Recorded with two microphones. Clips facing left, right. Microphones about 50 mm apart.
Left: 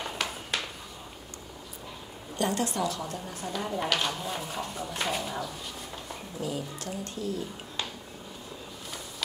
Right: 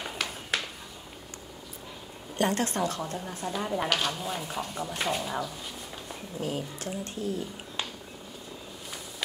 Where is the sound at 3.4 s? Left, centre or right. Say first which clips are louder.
Right 2 dB; centre.